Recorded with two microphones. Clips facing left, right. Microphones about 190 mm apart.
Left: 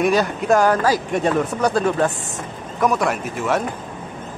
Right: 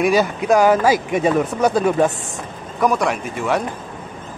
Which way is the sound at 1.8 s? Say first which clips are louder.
Right 2 dB; 15° right (ahead or behind).